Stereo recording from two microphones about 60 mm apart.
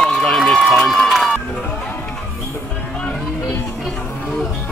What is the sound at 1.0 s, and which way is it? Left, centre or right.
Run, centre.